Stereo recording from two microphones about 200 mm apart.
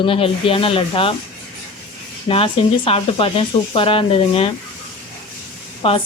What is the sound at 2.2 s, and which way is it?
Speech, 30° left (ahead or behind).